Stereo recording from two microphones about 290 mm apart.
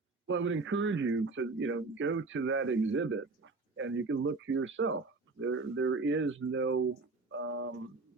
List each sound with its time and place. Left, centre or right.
0.3 s speech: right